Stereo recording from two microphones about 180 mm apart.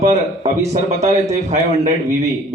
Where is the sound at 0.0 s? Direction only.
40° right (ahead or behind).